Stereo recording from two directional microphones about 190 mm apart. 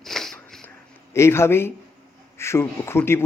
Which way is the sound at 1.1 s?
15° left (ahead or behind).